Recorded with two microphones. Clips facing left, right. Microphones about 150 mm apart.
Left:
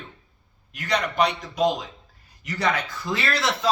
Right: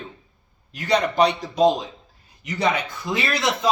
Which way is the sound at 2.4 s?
20° right (ahead or behind).